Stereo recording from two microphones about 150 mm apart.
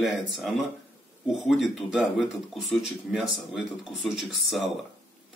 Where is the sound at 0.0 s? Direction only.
Centre (ahead or behind).